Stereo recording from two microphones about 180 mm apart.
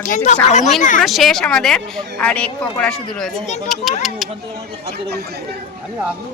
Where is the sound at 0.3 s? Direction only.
40° left (ahead or behind).